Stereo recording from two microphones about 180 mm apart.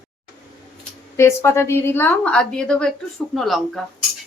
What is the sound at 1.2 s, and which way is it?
A woman's voice, 15° left (ahead or behind).